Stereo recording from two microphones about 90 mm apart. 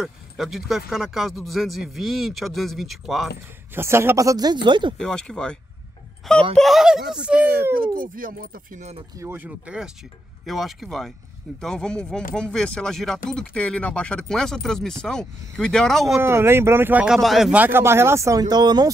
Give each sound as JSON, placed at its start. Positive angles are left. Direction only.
{"t": 0.0, "sound": "speech", "side_deg": -5}
{"t": 3.7, "sound": "speech", "side_deg": -30}
{"t": 4.9, "sound": "speech", "side_deg": 5}
{"t": 9.2, "sound": "speech", "side_deg": -25}
{"t": 9.5, "sound": "speech", "side_deg": -15}
{"t": 10.4, "sound": "speech", "side_deg": 0}
{"t": 16.2, "sound": "speech", "side_deg": -25}
{"t": 17.0, "sound": "speech", "side_deg": -5}
{"t": 17.5, "sound": "speech", "side_deg": -20}